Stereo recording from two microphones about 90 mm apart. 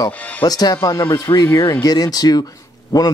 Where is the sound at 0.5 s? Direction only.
45° left (ahead or behind).